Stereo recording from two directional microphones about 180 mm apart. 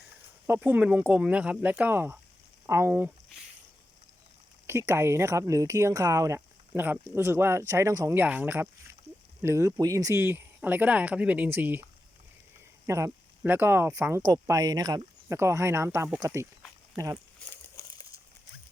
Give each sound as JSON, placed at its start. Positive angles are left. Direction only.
{"t": 0.4, "sound": "speech", "side_deg": -10}
{"t": 4.6, "sound": "speech", "side_deg": -15}
{"t": 17.5, "sound": "crumpling", "side_deg": 15}